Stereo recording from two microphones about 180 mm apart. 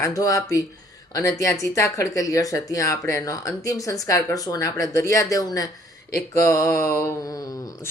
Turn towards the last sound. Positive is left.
turn(degrees=20)  # may be behind; listen again after turning